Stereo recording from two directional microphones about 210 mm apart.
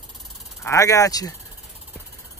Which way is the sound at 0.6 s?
15° left (ahead or behind).